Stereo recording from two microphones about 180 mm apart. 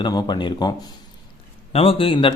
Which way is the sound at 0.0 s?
25° left (ahead or behind).